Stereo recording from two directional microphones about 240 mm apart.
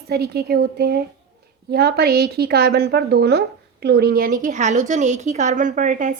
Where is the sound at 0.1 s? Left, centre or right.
Right.